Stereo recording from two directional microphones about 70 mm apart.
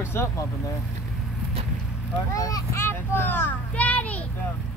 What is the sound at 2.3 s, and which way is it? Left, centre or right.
Speech, left.